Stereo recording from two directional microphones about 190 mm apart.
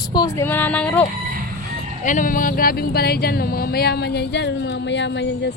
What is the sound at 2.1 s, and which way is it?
Speech, 45° left (ahead or behind).